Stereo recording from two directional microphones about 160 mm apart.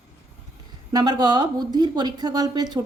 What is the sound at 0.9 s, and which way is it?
Speech, 25° right (ahead or behind).